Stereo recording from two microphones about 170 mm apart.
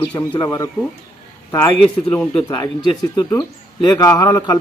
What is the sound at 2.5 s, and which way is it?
A man's voice, 20° left (ahead or behind).